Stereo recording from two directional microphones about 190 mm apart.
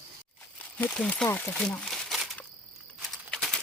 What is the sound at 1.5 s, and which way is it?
Crumpling, 5° left (ahead or behind).